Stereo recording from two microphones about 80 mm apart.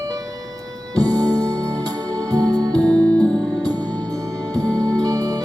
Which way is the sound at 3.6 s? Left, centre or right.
Right.